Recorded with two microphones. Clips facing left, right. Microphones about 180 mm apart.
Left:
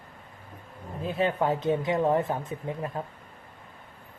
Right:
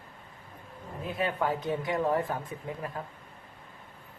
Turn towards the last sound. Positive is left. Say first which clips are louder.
# left 4 dB
turn(degrees=25)  # may be behind; listen again after turning